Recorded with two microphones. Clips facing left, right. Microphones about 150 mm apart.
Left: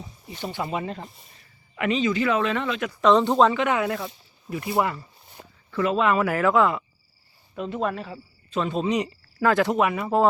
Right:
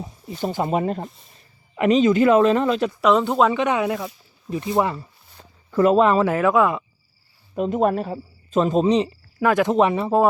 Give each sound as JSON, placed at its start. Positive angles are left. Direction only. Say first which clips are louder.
{"t": 0.4, "sound": "speech", "louder": "right 7 dB", "side_deg": -45}
{"t": 3.0, "sound": "speech", "louder": "left 1 dB", "side_deg": -5}
{"t": 3.6, "sound": "speech", "louder": "right 3 dB", "side_deg": -20}
{"t": 5.4, "sound": "a sound", "louder": "left 2 dB", "side_deg": 15}
{"t": 5.7, "sound": "speech", "louder": "right 6 dB", "side_deg": -45}
{"t": 7.5, "sound": "speech", "louder": "right 7 dB", "side_deg": -45}
{"t": 9.0, "sound": "speech", "louder": "right 4 dB", "side_deg": -20}
{"t": 9.7, "sound": "speech", "louder": "right 5 dB", "side_deg": -30}